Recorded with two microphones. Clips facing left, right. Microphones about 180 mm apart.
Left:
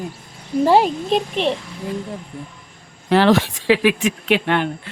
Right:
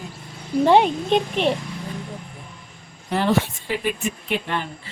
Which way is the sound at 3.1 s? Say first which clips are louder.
Left 6 dB; 85° left.